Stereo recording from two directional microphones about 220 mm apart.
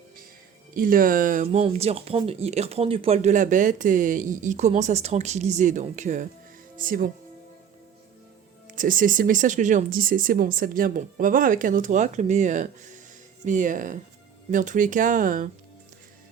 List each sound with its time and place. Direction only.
0.8 s speech: 40° right (ahead or behind)
8.7 s speech: 40° right (ahead or behind)